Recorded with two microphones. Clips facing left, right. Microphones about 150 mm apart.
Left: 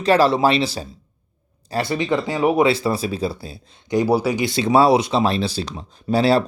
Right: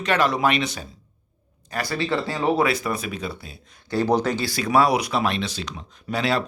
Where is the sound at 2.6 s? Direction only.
30° left (ahead or behind).